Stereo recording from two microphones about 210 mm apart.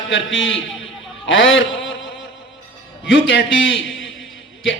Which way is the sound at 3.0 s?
60° left (ahead or behind).